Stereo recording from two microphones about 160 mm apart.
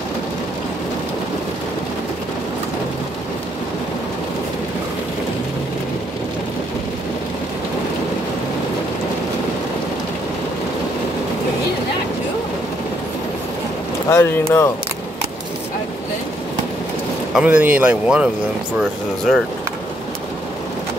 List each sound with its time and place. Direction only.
14.0 s speech: 15° left (ahead or behind)
17.3 s speech: 10° right (ahead or behind)